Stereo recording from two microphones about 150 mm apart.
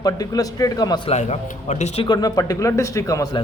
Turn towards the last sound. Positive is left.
turn(degrees=20)  # may be behind; listen again after turning